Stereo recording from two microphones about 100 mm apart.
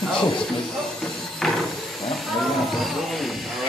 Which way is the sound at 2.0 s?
Centre (ahead or behind).